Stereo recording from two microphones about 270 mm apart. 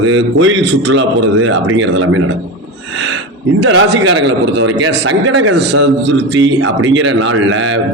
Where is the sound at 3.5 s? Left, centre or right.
Right.